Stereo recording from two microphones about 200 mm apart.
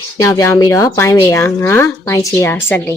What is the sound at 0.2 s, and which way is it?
A woman's voice, 15° left (ahead or behind).